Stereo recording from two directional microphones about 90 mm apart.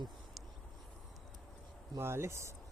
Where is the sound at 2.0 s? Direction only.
30° right (ahead or behind).